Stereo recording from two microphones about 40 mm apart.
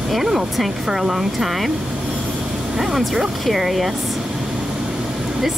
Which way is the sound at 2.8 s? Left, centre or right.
Centre.